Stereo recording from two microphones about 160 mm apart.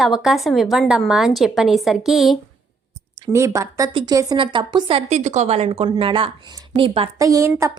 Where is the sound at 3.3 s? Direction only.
20° right (ahead or behind); by 7.1 s 35° right (ahead or behind).